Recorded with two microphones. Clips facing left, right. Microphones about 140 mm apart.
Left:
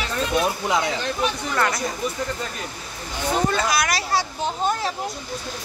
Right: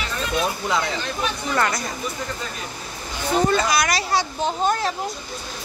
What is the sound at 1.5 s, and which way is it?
Speech, centre (ahead or behind).